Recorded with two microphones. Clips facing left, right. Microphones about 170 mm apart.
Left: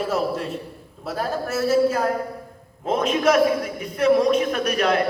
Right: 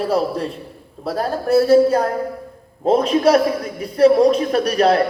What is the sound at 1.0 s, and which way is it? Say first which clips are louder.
A man's voice: right 5 dB; 35° right (ahead or behind).